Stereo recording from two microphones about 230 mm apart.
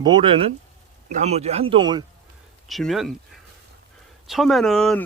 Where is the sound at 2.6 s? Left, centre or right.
Centre.